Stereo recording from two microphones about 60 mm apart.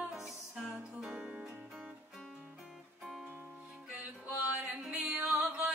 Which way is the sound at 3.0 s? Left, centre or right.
Centre.